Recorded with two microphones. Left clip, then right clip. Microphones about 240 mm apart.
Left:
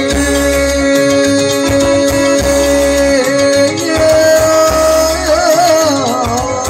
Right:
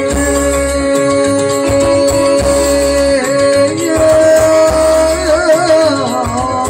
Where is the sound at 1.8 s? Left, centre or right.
Left.